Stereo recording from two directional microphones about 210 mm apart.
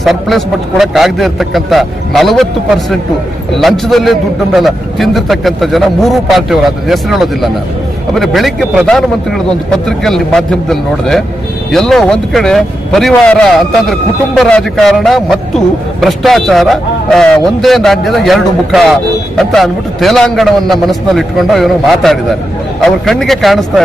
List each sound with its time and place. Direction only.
0.0 s a man's voice: centre (ahead or behind)
3.5 s a man's voice: centre (ahead or behind)